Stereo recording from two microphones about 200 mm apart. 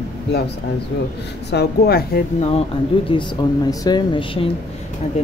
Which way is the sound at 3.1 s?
20° left (ahead or behind).